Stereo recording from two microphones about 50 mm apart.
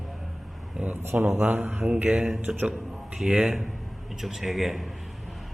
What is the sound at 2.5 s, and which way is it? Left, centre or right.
A man's voice, centre.